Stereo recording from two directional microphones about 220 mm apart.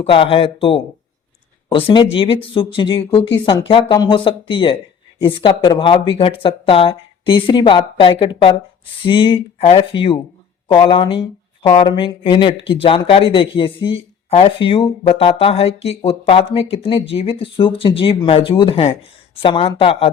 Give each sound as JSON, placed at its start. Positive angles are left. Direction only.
{"t": 0.0, "sound": "speech", "side_deg": 25}